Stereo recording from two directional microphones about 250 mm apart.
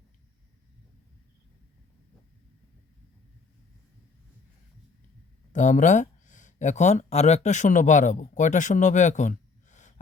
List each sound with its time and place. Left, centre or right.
5.5 s speech: left